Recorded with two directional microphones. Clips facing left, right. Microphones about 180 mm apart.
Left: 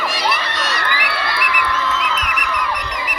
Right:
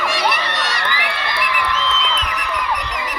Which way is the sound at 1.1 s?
20° right (ahead or behind).